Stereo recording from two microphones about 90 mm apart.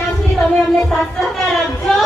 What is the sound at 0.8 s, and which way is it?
Music, 5° left (ahead or behind).